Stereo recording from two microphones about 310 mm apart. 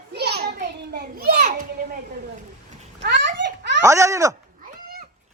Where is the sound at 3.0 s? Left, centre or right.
Right.